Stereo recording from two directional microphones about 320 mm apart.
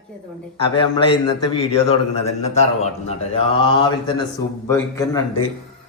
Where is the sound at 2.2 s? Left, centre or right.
Centre.